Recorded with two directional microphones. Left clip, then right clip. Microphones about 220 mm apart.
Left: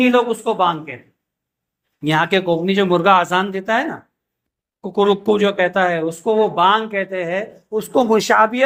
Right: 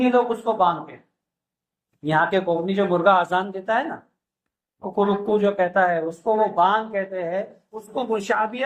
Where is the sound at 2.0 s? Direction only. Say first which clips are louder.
Left 4 dB; 45° left (ahead or behind).